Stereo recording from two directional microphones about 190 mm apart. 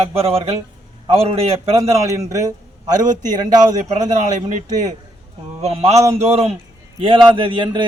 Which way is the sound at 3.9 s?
40° right (ahead or behind).